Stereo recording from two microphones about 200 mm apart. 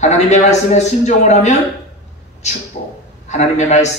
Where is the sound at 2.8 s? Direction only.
45° left (ahead or behind).